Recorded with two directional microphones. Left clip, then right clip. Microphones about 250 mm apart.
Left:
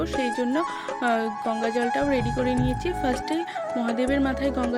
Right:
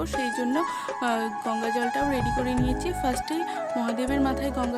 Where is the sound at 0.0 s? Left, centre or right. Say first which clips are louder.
Left 2 dB; centre.